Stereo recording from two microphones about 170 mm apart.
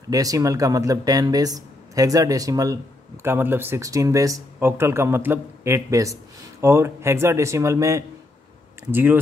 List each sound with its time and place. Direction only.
0.1 s speech: 20° right (ahead or behind)